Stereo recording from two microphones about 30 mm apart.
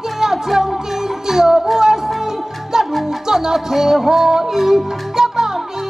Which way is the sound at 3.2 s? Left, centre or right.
Right.